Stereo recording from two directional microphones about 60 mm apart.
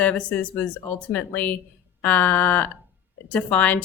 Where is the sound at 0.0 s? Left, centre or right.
Left.